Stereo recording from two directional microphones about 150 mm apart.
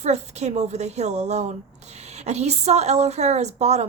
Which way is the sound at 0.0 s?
50° right (ahead or behind).